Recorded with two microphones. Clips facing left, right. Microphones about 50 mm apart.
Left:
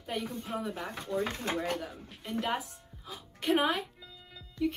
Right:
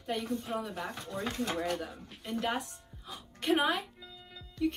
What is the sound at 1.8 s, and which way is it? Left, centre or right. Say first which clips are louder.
A woman's voice: even; centre.